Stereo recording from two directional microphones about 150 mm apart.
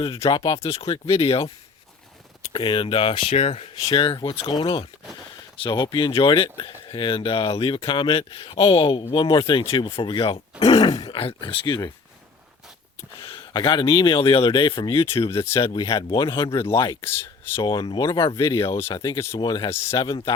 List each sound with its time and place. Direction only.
0.0 s speech: 35° left (ahead or behind)
2.5 s speech: 35° left (ahead or behind)
10.8 s groan: 25° left (ahead or behind)
11.2 s speech: 35° left (ahead or behind)
13.1 s speech: 35° left (ahead or behind)
15.3 s speech: 20° left (ahead or behind)
15.6 s speech: 30° left (ahead or behind)
16.5 s speech: 20° left (ahead or behind)
17.6 s speech: 30° left (ahead or behind)
18.6 s speech: 20° left (ahead or behind)
20.1 s speech: 35° left (ahead or behind)